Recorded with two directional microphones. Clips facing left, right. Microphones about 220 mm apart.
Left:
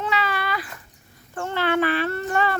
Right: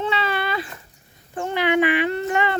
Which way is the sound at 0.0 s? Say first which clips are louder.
Right 2 dB; 25° right (ahead or behind).